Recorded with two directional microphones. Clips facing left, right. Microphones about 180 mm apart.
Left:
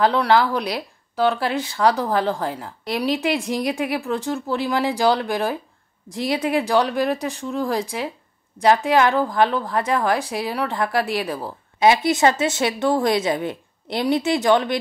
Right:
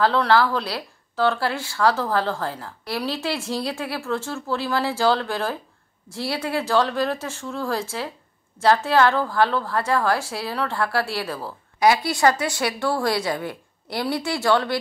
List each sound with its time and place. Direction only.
0.0 s a woman's voice: 15° left (ahead or behind)